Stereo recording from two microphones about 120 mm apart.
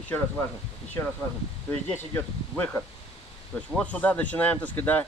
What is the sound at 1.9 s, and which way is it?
Speech, 15° left (ahead or behind).